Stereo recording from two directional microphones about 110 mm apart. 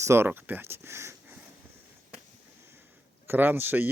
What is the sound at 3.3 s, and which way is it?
Speech, 20° right (ahead or behind).